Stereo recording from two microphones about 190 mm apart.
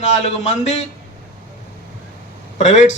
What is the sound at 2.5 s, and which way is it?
Speech, 40° left (ahead or behind).